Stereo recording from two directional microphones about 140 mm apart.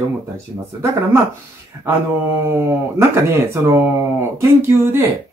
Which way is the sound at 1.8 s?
20° right (ahead or behind).